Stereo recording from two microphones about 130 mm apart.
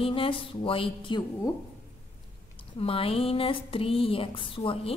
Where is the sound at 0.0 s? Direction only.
45° left (ahead or behind).